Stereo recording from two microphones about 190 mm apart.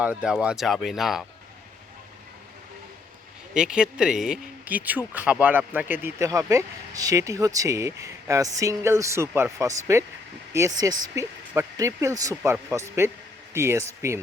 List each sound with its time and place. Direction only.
0.0 s speech: 5° right (ahead or behind)
3.5 s speech: 5° right (ahead or behind)